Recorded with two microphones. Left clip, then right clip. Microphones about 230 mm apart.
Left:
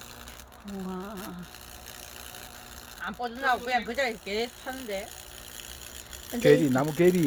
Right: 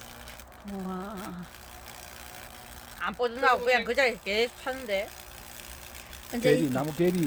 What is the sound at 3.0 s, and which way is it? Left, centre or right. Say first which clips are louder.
Speech: right 4 dB; right.